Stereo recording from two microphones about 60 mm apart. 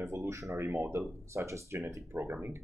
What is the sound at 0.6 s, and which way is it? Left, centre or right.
Speech, right.